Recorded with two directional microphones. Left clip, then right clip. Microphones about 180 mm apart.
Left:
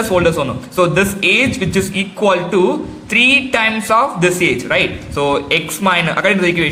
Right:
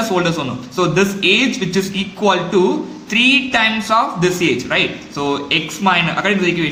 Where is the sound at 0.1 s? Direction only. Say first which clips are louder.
Left 4 dB; 20° left (ahead or behind).